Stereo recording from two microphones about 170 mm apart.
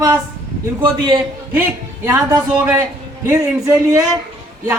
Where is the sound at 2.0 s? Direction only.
15° right (ahead or behind).